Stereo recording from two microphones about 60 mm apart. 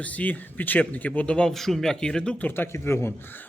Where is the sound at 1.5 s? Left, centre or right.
Centre.